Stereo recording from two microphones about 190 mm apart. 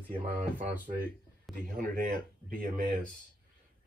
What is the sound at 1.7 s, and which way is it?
Speech, 45° right (ahead or behind).